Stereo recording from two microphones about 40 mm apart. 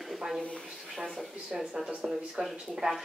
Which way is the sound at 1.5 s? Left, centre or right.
Centre.